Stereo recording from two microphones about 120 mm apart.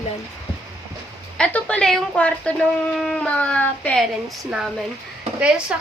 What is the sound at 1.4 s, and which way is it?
A woman's voice, 10° left (ahead or behind).